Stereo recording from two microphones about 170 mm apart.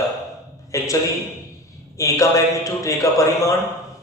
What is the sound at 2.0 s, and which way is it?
Speech, 20° left (ahead or behind).